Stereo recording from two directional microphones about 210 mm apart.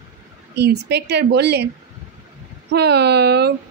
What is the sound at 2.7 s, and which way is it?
Speech, 50° right (ahead or behind).